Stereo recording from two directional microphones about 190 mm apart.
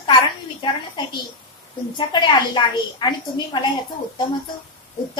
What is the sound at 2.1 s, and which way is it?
A woman's voice, 25° left (ahead or behind).